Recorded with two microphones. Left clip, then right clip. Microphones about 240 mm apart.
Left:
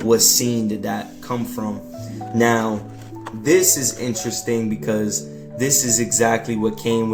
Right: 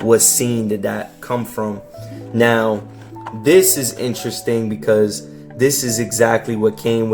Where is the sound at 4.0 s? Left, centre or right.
Right.